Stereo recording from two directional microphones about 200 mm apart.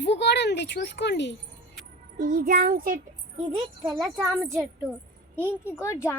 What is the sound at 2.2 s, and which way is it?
Speech, 45° right (ahead or behind).